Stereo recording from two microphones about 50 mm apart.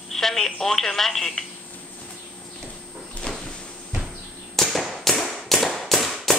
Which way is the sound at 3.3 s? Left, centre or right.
Centre.